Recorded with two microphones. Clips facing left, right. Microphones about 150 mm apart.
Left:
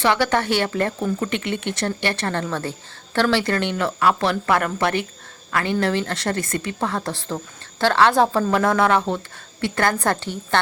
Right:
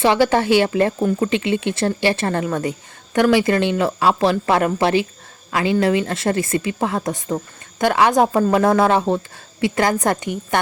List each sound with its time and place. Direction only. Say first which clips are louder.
0.0 s speech: right 4 dB; 25° right (ahead or behind)